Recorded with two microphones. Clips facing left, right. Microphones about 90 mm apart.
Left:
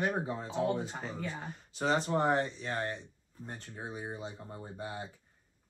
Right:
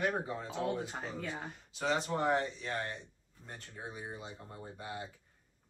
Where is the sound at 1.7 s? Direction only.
35° left (ahead or behind).